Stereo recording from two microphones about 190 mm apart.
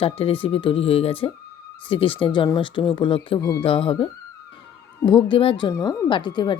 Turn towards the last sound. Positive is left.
turn(degrees=25)  # may be behind; listen again after turning